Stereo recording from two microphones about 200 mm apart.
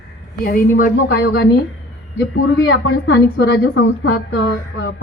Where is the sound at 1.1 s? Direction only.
60° left (ahead or behind).